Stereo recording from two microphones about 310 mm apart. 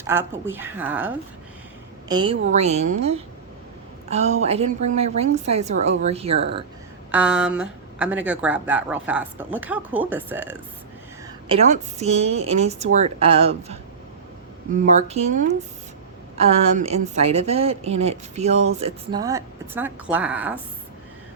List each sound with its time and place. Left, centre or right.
0.0 s a woman's voice: centre
7.1 s speech: centre
11.4 s a woman's voice: centre
14.8 s a woman's voice: right; by 20.6 s centre